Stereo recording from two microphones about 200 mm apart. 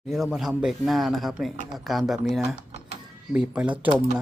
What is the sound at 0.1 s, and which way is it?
Speech, centre (ahead or behind).